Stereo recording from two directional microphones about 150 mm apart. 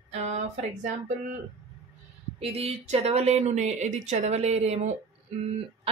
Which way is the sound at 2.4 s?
40° right (ahead or behind).